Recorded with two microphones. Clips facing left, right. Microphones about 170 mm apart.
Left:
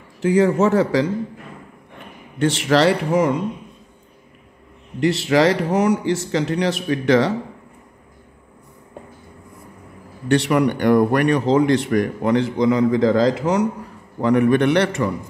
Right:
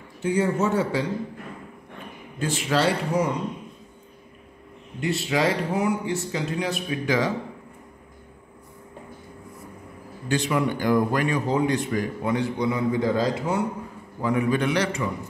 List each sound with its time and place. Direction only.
0.2 s a man's voice: 90° left
2.3 s speech: 80° left
5.0 s speech: 80° left
10.2 s a man's voice: 70° left (ahead or behind); by 13.7 s 90° left
14.2 s a man's voice: 70° left (ahead or behind)